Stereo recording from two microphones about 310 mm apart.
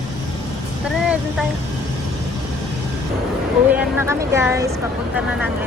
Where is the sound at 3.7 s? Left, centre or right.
Centre.